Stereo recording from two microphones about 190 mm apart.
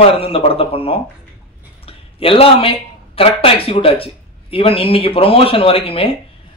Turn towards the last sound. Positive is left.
turn(degrees=30)  # may be behind; listen again after turning